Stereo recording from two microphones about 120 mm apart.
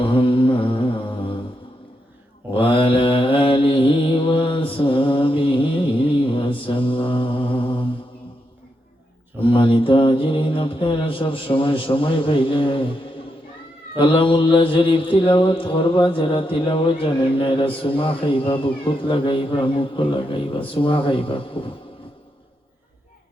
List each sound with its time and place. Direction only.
0.0 s mantra: 45° left (ahead or behind)
2.5 s mantra: 50° left (ahead or behind)
9.4 s mantra: 45° left (ahead or behind)
14.0 s mantra: 45° left (ahead or behind)